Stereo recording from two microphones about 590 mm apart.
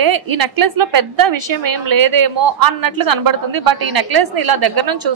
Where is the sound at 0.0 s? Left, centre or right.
Right.